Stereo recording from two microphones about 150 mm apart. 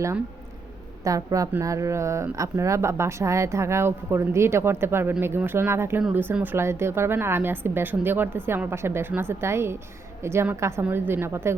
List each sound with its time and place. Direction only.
1.0 s a woman's voice: 20° right (ahead or behind)